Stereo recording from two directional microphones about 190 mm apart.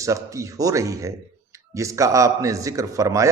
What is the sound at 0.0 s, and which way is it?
A man's voice, 15° right (ahead or behind).